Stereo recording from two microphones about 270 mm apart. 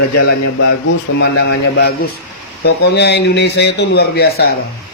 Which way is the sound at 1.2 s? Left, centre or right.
Left.